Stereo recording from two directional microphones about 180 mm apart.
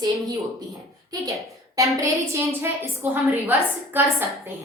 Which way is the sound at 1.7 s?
15° right (ahead or behind).